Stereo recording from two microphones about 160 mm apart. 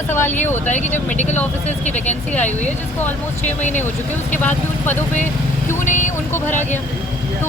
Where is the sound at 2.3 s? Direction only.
10° left (ahead or behind).